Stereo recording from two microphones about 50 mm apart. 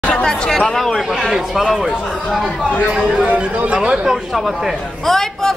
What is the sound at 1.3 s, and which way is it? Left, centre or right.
Speech, centre.